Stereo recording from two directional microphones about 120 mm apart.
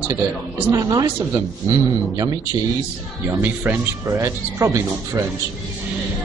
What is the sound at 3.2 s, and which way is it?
Speech, 15° right (ahead or behind).